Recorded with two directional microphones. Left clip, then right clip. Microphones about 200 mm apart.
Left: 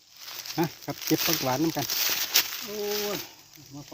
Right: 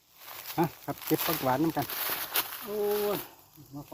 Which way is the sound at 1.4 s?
40° left (ahead or behind).